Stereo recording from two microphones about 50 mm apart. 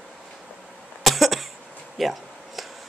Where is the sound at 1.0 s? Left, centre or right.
Centre.